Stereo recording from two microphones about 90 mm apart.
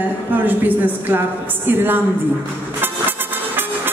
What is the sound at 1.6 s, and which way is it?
Speech, 20° right (ahead or behind).